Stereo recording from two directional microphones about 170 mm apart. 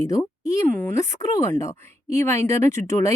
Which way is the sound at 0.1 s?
20° left (ahead or behind).